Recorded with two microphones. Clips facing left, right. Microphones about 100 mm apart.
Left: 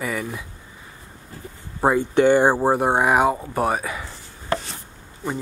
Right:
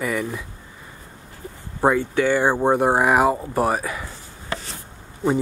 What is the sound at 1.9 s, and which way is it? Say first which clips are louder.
Speech: left 3 dB; 25° left (ahead or behind).